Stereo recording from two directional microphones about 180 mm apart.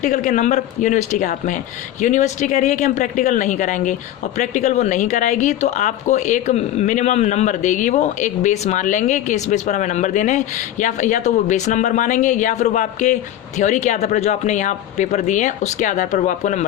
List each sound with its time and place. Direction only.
0.0 s speech: 45° left (ahead or behind)